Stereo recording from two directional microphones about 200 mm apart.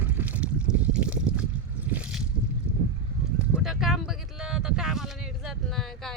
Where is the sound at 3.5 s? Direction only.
Centre (ahead or behind).